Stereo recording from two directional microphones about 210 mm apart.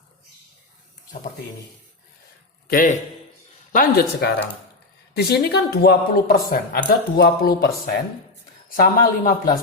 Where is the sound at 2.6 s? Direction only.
40° left (ahead or behind).